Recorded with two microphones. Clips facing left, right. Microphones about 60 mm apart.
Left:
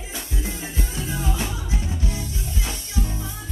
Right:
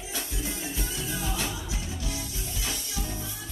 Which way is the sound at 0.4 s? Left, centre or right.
Left.